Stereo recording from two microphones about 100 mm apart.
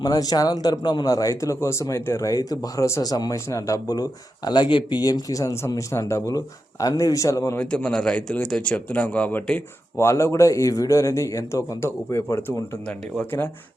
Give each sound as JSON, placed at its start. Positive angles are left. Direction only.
{"t": 0.0, "sound": "speech", "side_deg": 40}
{"t": 7.6, "sound": "speech", "side_deg": 10}
{"t": 10.1, "sound": "speech", "side_deg": 30}
{"t": 12.8, "sound": "speech", "side_deg": 10}